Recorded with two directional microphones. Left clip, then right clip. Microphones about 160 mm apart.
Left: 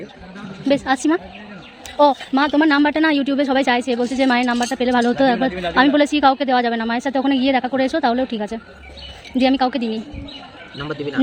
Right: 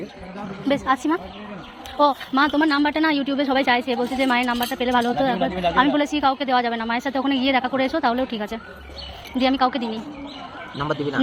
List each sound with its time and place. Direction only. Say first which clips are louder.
0.7 s a woman's voice: left 3 dB; 80° left
5.2 s a woman's voice: left 3 dB; 90° left; by 8.6 s 55° left (ahead or behind)
9.4 s a woman's voice: left 2 dB; 90° left